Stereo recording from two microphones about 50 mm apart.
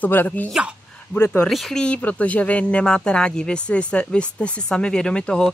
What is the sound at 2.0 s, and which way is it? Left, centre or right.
Speech, left.